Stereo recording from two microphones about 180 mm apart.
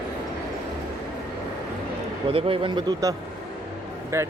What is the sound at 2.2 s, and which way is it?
Speech, 30° right (ahead or behind).